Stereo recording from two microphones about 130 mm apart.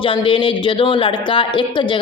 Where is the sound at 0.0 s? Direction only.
40° left (ahead or behind).